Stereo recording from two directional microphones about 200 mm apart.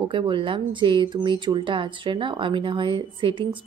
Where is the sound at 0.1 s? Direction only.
25° right (ahead or behind).